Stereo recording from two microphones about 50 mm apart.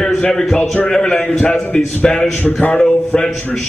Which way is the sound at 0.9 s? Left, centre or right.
Centre.